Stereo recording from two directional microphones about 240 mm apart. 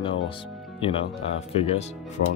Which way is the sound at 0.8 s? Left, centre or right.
Left.